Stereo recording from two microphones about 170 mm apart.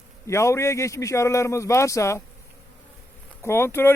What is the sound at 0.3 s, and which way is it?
A man's voice, 15° left (ahead or behind).